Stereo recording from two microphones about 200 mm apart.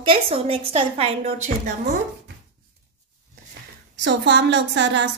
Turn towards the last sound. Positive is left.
turn(degrees=-60)  # may be behind; listen again after turning